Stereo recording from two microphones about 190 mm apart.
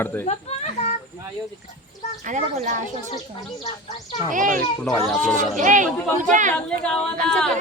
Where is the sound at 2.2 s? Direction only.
40° right (ahead or behind).